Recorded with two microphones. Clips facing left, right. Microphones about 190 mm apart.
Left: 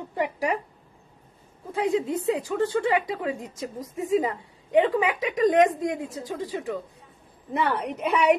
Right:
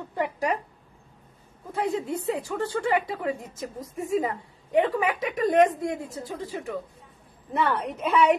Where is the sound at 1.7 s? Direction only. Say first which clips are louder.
Left 3 dB; 15° left (ahead or behind).